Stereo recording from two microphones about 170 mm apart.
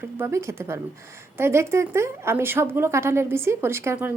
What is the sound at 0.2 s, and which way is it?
A woman's voice, 15° right (ahead or behind).